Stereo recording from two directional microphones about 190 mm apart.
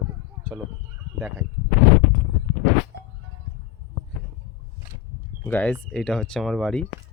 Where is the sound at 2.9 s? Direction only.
60° right (ahead or behind).